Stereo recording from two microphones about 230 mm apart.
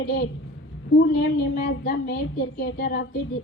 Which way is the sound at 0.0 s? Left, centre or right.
Left.